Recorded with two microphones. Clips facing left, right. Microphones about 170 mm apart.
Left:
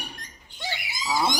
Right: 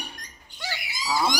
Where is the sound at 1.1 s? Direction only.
20° left (ahead or behind).